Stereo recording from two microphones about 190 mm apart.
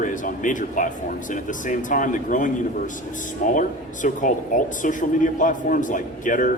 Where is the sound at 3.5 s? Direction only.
45° left (ahead or behind).